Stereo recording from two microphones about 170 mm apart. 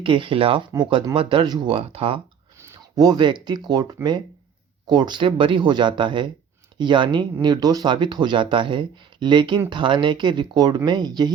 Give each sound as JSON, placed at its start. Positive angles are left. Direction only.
{"t": 0.0, "sound": "speech", "side_deg": -30}
{"t": 2.6, "sound": "speech", "side_deg": -20}
{"t": 4.9, "sound": "speech", "side_deg": -25}